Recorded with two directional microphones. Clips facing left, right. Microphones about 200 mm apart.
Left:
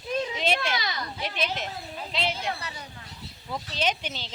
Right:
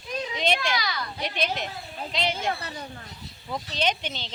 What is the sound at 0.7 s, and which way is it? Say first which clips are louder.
Children playing: right 1 dB; 25° left (ahead or behind).